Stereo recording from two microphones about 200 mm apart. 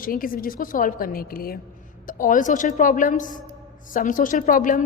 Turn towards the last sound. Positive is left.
turn(degrees=40)  # may be behind; listen again after turning